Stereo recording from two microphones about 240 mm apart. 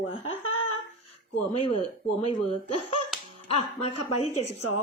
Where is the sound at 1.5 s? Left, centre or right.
Left.